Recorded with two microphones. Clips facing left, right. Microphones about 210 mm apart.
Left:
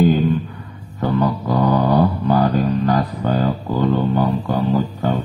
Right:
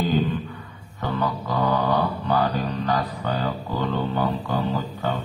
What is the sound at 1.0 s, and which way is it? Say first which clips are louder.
Music: left 7 dB; 40° left (ahead or behind).